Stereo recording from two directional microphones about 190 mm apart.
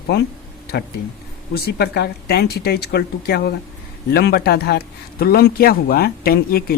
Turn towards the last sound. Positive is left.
turn(degrees=55)  # may be behind; listen again after turning